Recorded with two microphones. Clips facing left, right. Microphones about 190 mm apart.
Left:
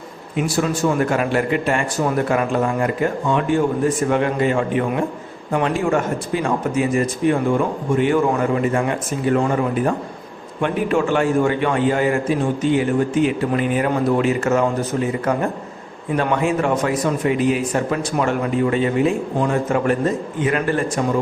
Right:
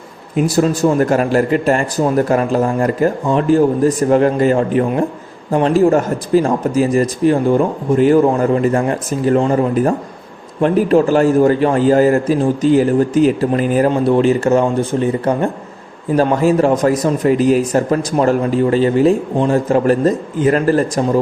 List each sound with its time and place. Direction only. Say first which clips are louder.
0.3 s speech: right 6 dB; 40° right (ahead or behind)